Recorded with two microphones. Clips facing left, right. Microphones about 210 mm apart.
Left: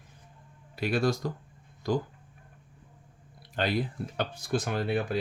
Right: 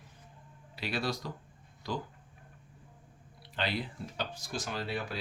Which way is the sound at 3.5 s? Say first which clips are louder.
Left 6 dB; 45° left (ahead or behind).